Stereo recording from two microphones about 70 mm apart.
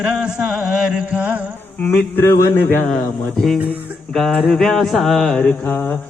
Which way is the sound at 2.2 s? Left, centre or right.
Left.